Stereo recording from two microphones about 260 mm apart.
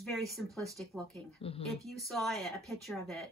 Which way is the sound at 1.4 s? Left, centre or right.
Left.